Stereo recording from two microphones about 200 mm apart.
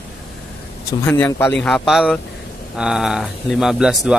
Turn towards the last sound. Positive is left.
turn(degrees=-5)  # may be behind; listen again after turning